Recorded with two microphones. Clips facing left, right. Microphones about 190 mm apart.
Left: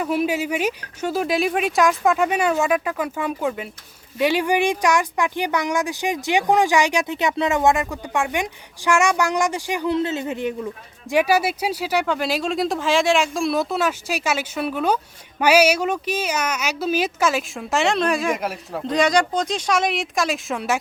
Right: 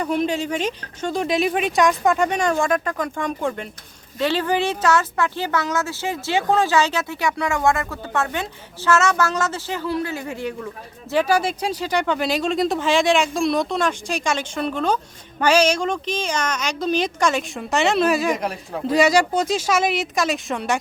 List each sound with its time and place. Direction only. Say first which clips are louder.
0.0 s speech: even; 5° left (ahead or behind)